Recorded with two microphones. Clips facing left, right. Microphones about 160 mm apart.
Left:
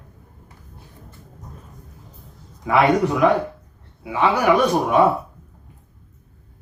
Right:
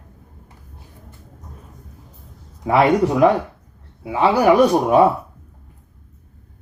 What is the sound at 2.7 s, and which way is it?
Speech, 35° right (ahead or behind).